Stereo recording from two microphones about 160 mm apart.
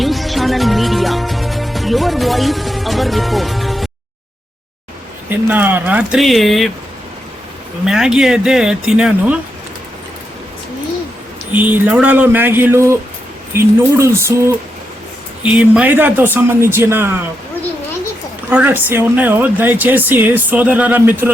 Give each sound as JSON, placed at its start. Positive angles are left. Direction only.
{"t": 0.0, "sound": "music", "side_deg": 0}
{"t": 5.3, "sound": "speech", "side_deg": -10}
{"t": 7.9, "sound": "speech", "side_deg": -5}
{"t": 11.5, "sound": "speech", "side_deg": -10}
{"t": 18.5, "sound": "speech", "side_deg": -10}